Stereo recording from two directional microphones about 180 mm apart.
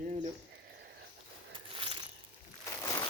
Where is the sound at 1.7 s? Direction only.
30° right (ahead or behind).